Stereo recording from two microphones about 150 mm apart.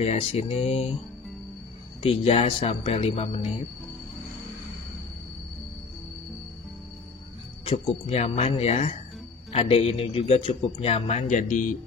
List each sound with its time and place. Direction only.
0.0 s a man's voice: 45° left (ahead or behind)
2.0 s speech: 40° left (ahead or behind)
8.1 s a man's voice: 45° left (ahead or behind)